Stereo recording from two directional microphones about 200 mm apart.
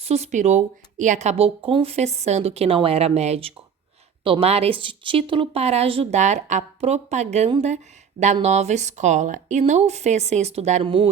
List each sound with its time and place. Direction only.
0.0 s a woman's voice: 30° right (ahead or behind)